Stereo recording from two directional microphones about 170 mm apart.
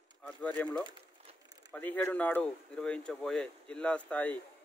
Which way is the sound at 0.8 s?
25° right (ahead or behind).